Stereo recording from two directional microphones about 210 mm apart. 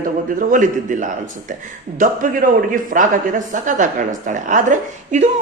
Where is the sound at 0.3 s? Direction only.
40° right (ahead or behind).